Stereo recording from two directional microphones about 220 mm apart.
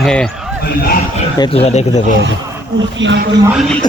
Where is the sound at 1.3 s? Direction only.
25° left (ahead or behind).